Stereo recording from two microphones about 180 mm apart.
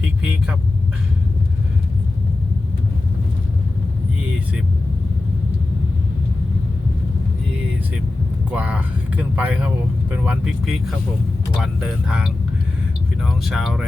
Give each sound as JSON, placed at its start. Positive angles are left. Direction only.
{"t": 0.2, "sound": "speech", "side_deg": -5}
{"t": 8.5, "sound": "speech", "side_deg": -10}